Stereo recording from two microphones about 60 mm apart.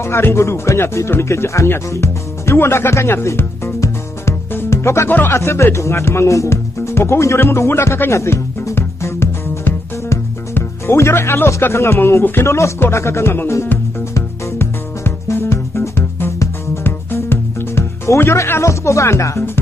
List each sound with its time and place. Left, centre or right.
0.0 s speech: left
1.9 s music: left
5.3 s speech: left
8.7 s music: left
11.7 s speech: left
14.1 s music: left